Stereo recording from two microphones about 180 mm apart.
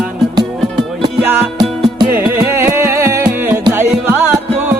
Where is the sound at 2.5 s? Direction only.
15° right (ahead or behind).